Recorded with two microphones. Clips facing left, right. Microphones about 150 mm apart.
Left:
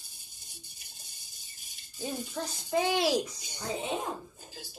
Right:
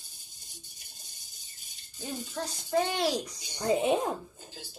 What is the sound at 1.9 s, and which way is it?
A woman's voice, 10° left (ahead or behind).